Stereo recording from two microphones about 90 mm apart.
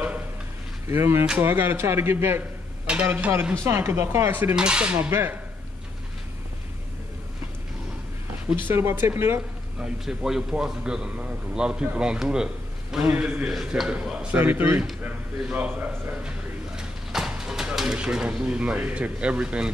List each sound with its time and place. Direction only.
0.8 s speech: 30° right (ahead or behind)
4.6 s a man's voice: 10° right (ahead or behind)
8.6 s speech: 25° right (ahead or behind)
9.8 s a man's voice: 5° right (ahead or behind)
13.0 s speech: 20° right (ahead or behind)
13.5 s a man's voice: 5° right (ahead or behind)